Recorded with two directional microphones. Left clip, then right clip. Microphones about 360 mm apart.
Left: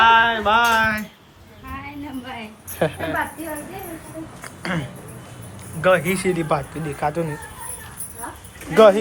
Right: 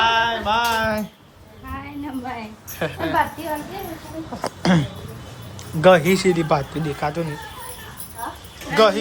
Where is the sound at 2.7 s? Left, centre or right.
Centre.